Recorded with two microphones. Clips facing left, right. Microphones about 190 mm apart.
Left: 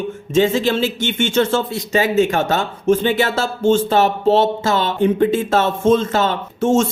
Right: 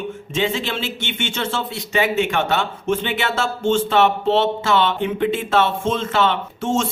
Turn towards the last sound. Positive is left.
turn(degrees=45)  # may be behind; listen again after turning